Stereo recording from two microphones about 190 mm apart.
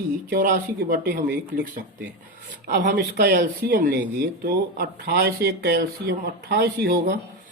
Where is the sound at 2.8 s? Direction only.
60° right (ahead or behind).